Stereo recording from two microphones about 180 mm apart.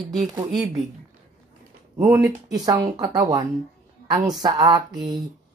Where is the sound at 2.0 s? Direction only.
15° right (ahead or behind).